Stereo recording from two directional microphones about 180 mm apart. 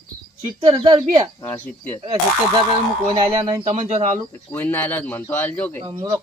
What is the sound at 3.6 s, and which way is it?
Speech, 35° right (ahead or behind).